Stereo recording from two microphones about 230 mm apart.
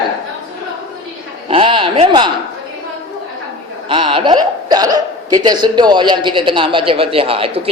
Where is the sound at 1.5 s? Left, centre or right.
Right.